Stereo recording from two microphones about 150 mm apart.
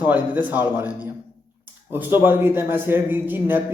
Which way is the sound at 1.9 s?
15° right (ahead or behind).